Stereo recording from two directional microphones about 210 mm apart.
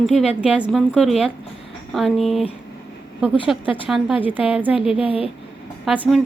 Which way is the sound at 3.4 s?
25° left (ahead or behind).